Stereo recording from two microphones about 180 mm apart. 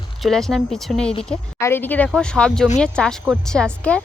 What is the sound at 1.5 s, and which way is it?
Speech, 15° left (ahead or behind).